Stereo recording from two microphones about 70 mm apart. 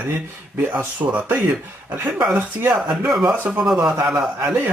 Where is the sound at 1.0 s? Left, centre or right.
Right.